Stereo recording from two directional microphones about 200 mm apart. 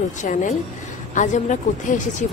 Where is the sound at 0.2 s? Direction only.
40° left (ahead or behind).